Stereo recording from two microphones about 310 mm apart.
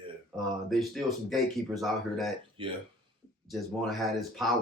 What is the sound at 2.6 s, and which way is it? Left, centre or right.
Speech, centre.